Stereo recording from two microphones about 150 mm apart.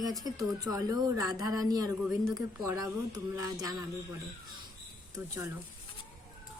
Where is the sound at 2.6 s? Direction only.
20° right (ahead or behind).